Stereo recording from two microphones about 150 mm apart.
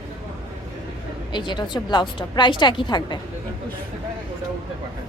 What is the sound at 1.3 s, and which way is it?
A woman's voice, 30° left (ahead or behind).